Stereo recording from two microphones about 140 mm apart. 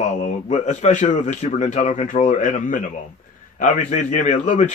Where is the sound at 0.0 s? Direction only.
60° left (ahead or behind).